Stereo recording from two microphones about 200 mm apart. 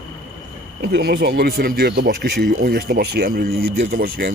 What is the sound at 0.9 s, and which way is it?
Speech, 55° right (ahead or behind).